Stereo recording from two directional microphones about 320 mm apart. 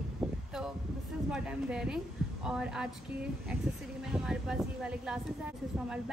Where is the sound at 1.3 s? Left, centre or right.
Centre.